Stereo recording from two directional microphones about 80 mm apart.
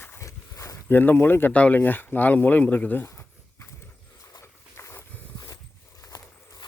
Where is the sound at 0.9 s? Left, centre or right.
Left.